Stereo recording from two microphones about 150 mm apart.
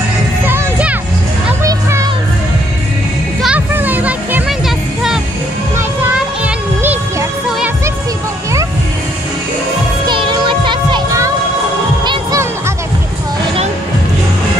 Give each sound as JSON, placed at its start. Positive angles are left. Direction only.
{"t": 0.5, "sound": "music", "side_deg": -10}
{"t": 1.6, "sound": "music", "side_deg": -20}
{"t": 3.4, "sound": "music", "side_deg": -10}
{"t": 10.0, "sound": "music", "side_deg": -30}